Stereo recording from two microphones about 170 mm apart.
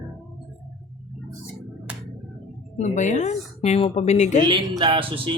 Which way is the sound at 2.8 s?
45° left (ahead or behind).